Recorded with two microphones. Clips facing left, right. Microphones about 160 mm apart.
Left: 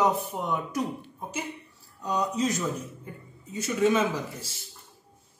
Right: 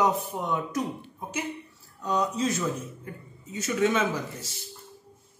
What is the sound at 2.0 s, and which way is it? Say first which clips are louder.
Speech: even; 10° left (ahead or behind).